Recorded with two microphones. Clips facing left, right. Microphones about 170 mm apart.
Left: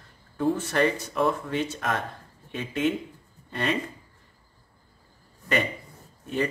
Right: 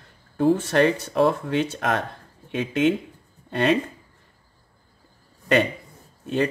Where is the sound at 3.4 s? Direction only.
70° right (ahead or behind).